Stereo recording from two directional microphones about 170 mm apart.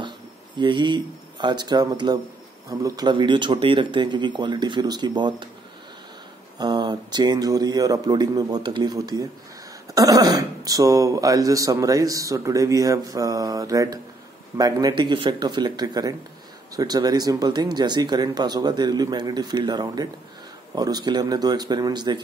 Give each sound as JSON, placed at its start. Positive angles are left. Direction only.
{"t": 0.6, "sound": "speech", "side_deg": -25}
{"t": 6.6, "sound": "speech", "side_deg": -25}